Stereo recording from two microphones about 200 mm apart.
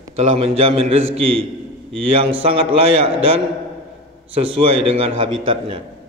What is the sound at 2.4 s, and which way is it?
A man's voice, 30° right (ahead or behind).